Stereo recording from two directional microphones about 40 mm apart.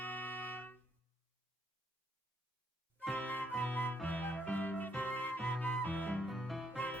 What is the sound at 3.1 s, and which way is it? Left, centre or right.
Music, left.